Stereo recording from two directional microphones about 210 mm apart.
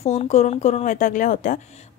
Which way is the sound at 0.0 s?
30° left (ahead or behind).